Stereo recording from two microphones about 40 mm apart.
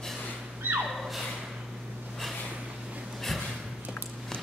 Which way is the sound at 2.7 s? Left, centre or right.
Right.